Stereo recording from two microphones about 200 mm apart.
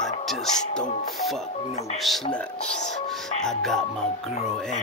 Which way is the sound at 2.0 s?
Centre (ahead or behind).